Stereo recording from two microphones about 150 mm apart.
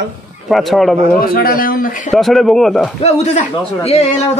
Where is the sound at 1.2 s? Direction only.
75° left (ahead or behind).